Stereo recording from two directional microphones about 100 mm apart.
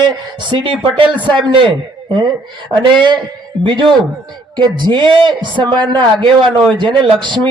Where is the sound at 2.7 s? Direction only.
50° right (ahead or behind).